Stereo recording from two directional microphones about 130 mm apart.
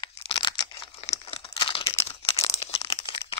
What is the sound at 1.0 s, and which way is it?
Crumpling, 50° left (ahead or behind).